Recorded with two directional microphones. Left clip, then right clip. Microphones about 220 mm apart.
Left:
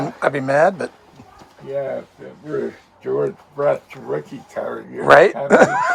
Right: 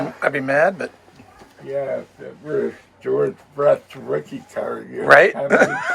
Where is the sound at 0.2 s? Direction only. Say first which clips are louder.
Left 2 dB; 25° left (ahead or behind).